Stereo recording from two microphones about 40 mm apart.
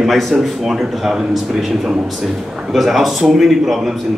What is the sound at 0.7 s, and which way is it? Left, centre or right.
A man's voice, centre.